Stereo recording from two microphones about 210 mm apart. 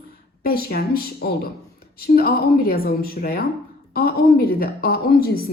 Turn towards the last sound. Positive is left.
turn(degrees=45)  # may be behind; listen again after turning